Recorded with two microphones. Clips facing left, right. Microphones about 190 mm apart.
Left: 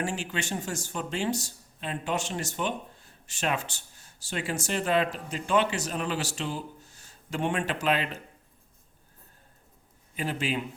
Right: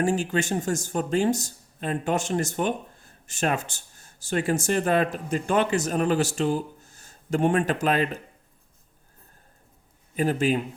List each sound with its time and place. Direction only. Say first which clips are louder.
0.0 s speech: right 8 dB; 45° right (ahead or behind)
10.2 s speech: right 7 dB; 45° right (ahead or behind)